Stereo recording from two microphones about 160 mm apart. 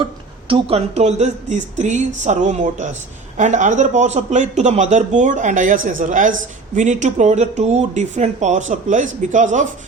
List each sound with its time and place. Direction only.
0.0 s a man's voice: 30° right (ahead or behind); by 9.6 s 50° right (ahead or behind)